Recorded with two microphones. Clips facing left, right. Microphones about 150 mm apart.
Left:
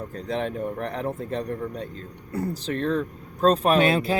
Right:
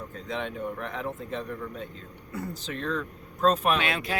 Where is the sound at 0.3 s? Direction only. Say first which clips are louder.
Left 5 dB; 40° left (ahead or behind).